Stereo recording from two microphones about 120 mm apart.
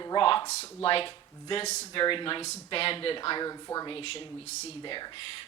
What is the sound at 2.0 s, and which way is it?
Speech, 45° left (ahead or behind).